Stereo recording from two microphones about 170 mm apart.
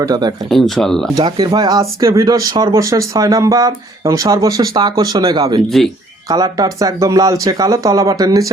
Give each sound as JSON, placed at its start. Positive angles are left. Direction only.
{"t": 0.0, "sound": "speech", "side_deg": -25}
{"t": 0.5, "sound": "speech", "side_deg": 0}
{"t": 1.1, "sound": "speech", "side_deg": -25}
{"t": 5.6, "sound": "speech", "side_deg": 0}
{"t": 6.2, "sound": "speech", "side_deg": -20}